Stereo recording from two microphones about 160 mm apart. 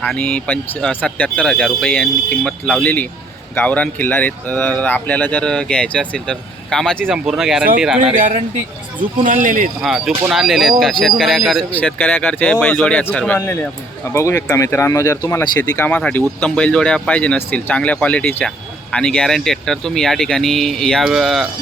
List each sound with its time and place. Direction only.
0.0 s speech: 5° left (ahead or behind)
8.1 s speech: 55° right (ahead or behind)
9.8 s speech: centre (ahead or behind)